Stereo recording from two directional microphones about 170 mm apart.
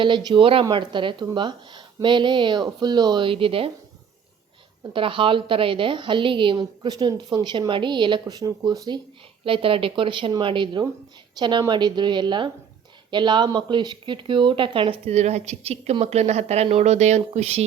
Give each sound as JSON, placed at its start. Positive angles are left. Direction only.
{"t": 0.0, "sound": "a woman's voice", "side_deg": -25}
{"t": 4.8, "sound": "a woman's voice", "side_deg": -30}